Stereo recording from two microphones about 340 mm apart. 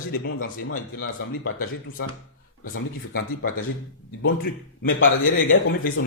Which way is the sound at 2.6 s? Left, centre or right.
Left.